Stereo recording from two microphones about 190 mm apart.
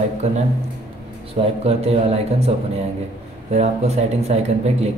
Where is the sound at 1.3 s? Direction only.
30° right (ahead or behind).